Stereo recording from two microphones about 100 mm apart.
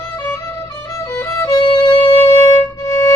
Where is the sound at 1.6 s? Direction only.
50° left (ahead or behind).